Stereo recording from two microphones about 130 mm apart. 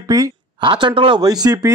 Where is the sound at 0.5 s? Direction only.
40° right (ahead or behind).